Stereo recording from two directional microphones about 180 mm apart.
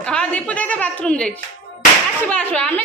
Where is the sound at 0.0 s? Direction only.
5° left (ahead or behind).